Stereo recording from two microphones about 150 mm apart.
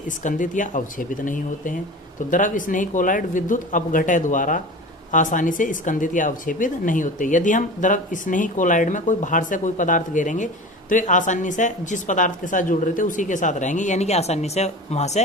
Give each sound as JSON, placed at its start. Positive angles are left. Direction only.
{"t": 0.2, "sound": "speech", "side_deg": 60}